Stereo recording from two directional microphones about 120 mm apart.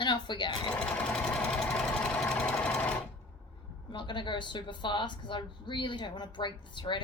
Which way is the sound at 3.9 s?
40° left (ahead or behind).